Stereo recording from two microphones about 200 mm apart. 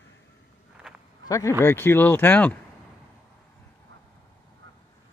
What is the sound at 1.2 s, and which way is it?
Speech, 15° left (ahead or behind).